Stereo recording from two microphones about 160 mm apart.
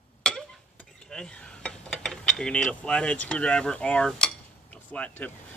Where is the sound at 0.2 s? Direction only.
5° left (ahead or behind).